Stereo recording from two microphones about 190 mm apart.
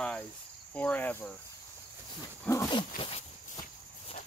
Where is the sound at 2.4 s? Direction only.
15° left (ahead or behind).